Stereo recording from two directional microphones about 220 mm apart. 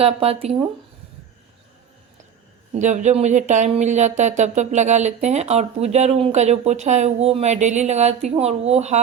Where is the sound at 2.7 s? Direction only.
35° right (ahead or behind).